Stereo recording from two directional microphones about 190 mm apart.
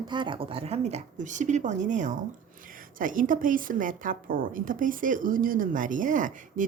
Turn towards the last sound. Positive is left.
turn(degrees=-45)  # may be behind; listen again after turning